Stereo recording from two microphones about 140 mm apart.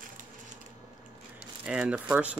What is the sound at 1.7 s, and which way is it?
Speech, 10° right (ahead or behind).